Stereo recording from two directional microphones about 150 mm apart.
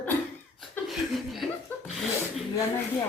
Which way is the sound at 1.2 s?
Centre (ahead or behind).